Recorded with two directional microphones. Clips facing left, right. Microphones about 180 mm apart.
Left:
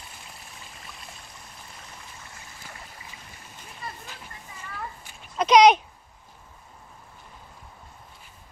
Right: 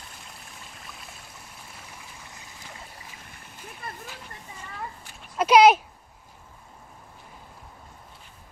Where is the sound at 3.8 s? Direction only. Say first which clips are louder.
Left 1 dB; 55° right (ahead or behind).